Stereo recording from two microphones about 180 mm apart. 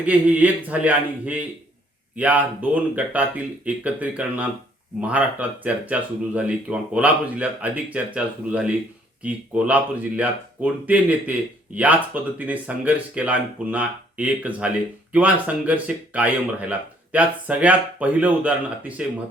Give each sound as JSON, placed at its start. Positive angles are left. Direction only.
{"t": 0.0, "sound": "speech", "side_deg": -10}